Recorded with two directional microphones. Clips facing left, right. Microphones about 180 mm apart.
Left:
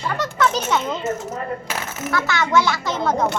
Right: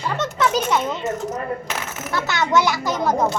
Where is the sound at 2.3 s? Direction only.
20° right (ahead or behind).